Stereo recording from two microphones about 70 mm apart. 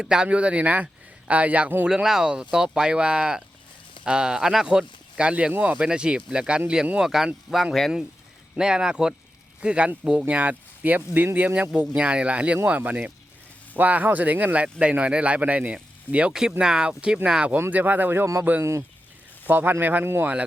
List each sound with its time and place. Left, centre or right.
0.0 s speech: centre
1.9 s speech: centre
8.5 s speech: centre
17.7 s speech: right
20.1 s speech: right